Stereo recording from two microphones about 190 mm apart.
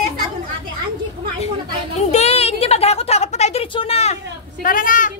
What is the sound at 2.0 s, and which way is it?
A woman's voice, 35° left (ahead or behind).